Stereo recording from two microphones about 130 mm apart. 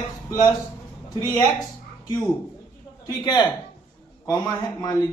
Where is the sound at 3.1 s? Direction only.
30° left (ahead or behind).